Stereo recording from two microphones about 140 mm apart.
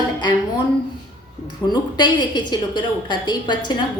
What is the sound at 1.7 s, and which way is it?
A woman's voice, 30° left (ahead or behind).